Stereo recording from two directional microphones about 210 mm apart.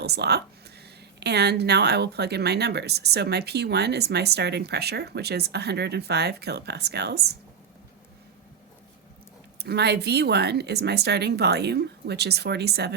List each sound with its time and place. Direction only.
0.0 s speech: 50° right (ahead or behind)
9.6 s speech: 50° right (ahead or behind)